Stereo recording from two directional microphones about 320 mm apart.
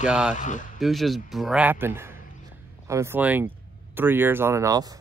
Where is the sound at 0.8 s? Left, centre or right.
Centre.